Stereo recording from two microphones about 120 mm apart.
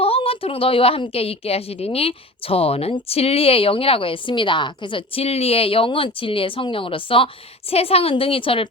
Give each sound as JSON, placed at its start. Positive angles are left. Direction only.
{"t": 0.0, "sound": "a woman's voice", "side_deg": 55}